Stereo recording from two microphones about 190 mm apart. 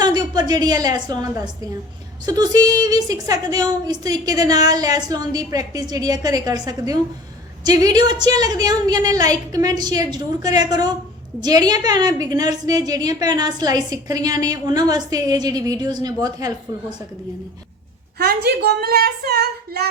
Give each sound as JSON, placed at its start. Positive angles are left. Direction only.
{"t": 0.0, "sound": "a woman's voice", "side_deg": -20}
{"t": 18.2, "sound": "a woman's voice", "side_deg": -55}